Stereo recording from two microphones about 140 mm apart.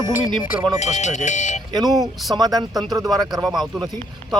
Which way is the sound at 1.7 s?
25° right (ahead or behind).